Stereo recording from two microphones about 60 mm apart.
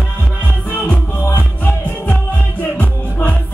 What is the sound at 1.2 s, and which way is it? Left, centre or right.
Music, left.